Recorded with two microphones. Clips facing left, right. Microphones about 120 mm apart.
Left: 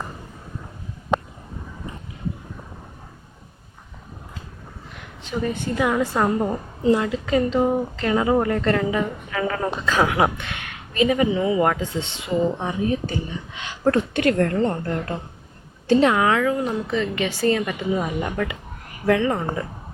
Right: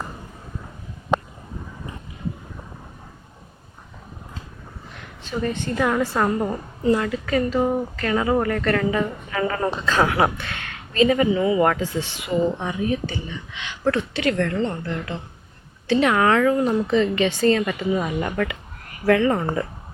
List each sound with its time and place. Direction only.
5.2 s a woman's voice: 10° left (ahead or behind)
6.8 s speech: 20° left (ahead or behind)
9.0 s a woman's voice: centre (ahead or behind); by 14.9 s 45° left (ahead or behind)
16.0 s a woman's voice: 10° left (ahead or behind)